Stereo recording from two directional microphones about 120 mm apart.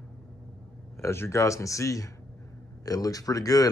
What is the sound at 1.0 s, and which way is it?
Speech, 20° left (ahead or behind).